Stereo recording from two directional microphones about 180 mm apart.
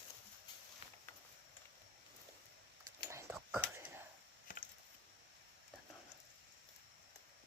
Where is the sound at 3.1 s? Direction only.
15° right (ahead or behind).